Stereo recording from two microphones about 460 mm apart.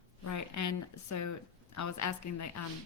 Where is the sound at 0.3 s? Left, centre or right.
Left.